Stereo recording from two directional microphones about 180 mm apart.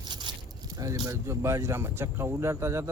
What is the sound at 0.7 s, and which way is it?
Speech, 20° right (ahead or behind).